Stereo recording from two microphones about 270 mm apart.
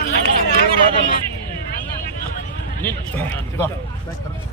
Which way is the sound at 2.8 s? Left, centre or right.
Centre.